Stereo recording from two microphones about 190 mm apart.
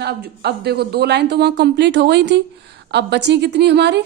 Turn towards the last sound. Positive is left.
turn(degrees=-65)  # may be behind; listen again after turning